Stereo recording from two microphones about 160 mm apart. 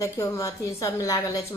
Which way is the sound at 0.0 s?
20° left (ahead or behind).